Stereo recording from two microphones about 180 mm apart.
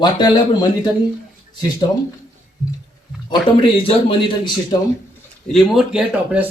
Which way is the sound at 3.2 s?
25° left (ahead or behind).